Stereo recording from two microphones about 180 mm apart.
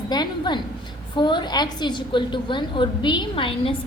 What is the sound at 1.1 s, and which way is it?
A woman's voice, 25° left (ahead or behind).